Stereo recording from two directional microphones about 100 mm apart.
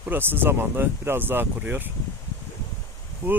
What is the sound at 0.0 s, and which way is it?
Speech, 20° right (ahead or behind).